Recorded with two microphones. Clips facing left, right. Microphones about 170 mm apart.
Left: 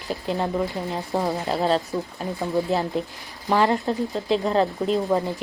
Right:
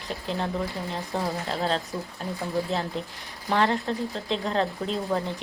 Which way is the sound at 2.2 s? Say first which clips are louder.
Left 4 dB; 5° left (ahead or behind).